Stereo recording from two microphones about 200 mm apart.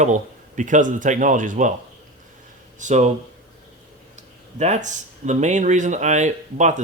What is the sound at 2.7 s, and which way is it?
Speech, 35° right (ahead or behind).